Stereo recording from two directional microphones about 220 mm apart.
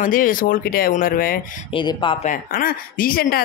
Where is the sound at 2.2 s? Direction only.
40° left (ahead or behind).